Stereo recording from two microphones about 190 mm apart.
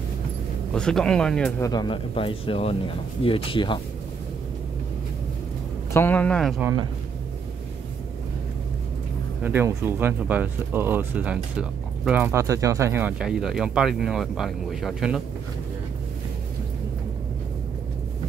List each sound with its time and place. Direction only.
0.7 s speech: 5° left (ahead or behind)
1.6 s speech: 20° left (ahead or behind)
5.9 s speech: 10° left (ahead or behind)
6.6 s speech: 20° right (ahead or behind)
9.4 s speech: 10° right (ahead or behind)